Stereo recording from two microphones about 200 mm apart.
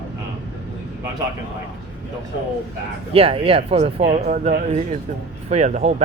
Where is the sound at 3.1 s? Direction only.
30° right (ahead or behind).